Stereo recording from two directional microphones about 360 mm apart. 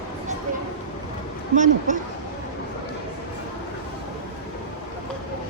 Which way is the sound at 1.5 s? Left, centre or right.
Right.